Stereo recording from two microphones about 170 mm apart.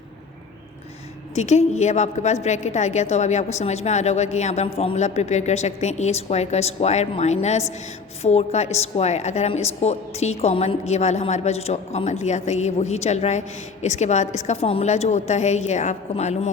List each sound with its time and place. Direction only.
1.4 s a woman's voice: 40° left (ahead or behind)